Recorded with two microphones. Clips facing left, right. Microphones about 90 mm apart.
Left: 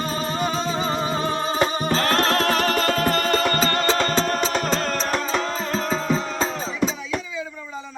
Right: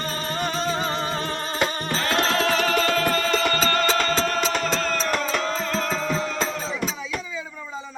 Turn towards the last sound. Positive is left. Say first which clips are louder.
# left 3 dB
turn(degrees=15)  # may be behind; listen again after turning